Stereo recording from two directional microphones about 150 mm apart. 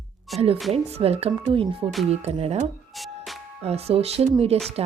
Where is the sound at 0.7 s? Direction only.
40° right (ahead or behind).